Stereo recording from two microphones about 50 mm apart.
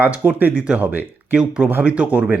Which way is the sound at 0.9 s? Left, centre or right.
Right.